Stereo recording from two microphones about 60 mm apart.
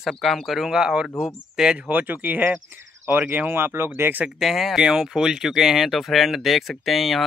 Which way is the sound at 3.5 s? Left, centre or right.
Right.